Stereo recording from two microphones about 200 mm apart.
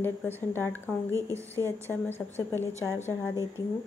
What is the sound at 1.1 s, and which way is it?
Speech, 15° right (ahead or behind).